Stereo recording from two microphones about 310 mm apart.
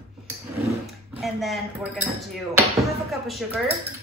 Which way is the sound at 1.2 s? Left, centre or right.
Centre.